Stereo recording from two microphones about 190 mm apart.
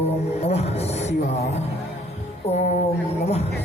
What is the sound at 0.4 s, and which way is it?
Music, 35° left (ahead or behind).